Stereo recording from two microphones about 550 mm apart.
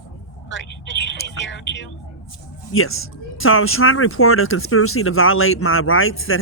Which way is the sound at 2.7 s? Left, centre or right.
Left.